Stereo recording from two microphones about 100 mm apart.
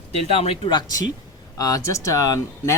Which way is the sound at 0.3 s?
65° left (ahead or behind).